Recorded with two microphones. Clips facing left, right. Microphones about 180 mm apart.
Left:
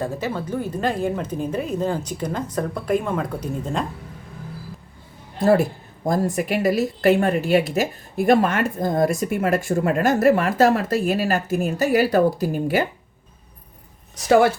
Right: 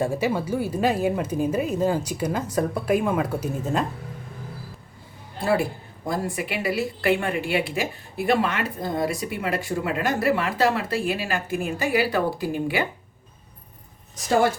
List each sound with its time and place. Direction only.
0.0 s speech: 10° right (ahead or behind)
5.4 s a woman's voice: 40° left (ahead or behind)